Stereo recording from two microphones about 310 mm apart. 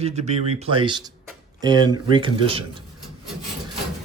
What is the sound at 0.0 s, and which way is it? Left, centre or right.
Speech, right.